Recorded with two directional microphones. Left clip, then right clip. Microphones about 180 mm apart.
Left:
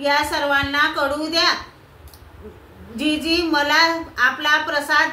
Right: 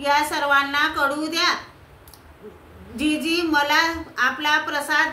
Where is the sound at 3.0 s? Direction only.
15° right (ahead or behind).